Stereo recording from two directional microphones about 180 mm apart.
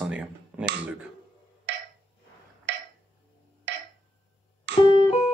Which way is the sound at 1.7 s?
75° right (ahead or behind).